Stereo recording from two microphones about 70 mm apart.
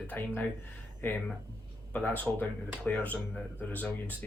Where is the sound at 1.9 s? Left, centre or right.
Left.